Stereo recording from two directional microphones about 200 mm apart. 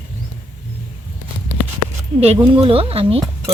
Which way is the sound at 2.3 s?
25° right (ahead or behind).